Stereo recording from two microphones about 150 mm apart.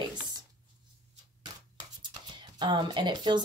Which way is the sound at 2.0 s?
30° right (ahead or behind).